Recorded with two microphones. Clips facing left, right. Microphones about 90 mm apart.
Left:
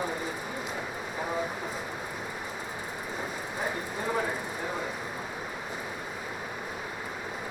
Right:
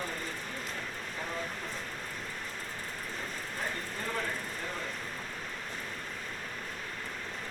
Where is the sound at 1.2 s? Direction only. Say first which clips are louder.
Left 7 dB; 15° left (ahead or behind).